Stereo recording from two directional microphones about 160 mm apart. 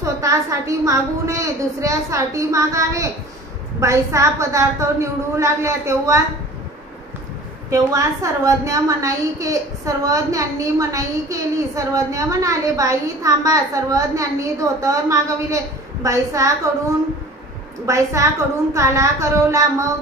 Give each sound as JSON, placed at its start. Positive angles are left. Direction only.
{"t": 0.0, "sound": "a woman's voice", "side_deg": -20}
{"t": 7.7, "sound": "a woman's voice", "side_deg": -20}
{"t": 17.8, "sound": "a woman's voice", "side_deg": -20}